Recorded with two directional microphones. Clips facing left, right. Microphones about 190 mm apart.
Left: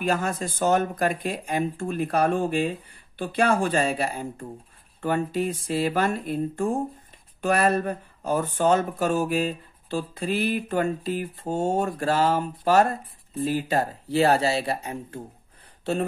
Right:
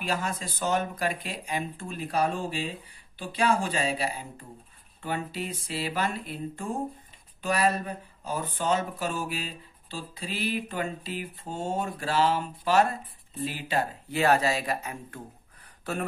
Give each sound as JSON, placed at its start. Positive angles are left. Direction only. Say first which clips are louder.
{"t": 0.0, "sound": "speech", "louder": "left 6 dB", "side_deg": 50}